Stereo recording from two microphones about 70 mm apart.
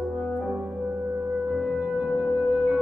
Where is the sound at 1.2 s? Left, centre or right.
Right.